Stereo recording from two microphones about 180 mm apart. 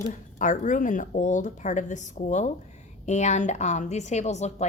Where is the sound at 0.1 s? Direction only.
45° left (ahead or behind).